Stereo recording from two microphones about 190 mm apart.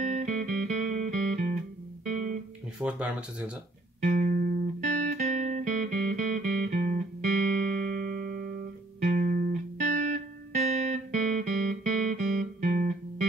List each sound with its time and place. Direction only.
0.0 s music: 40° right (ahead or behind)
2.8 s speech: 5° right (ahead or behind)
4.0 s music: 45° right (ahead or behind)